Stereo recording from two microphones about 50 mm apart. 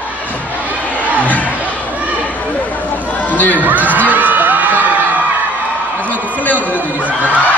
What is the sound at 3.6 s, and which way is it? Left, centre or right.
Music, right.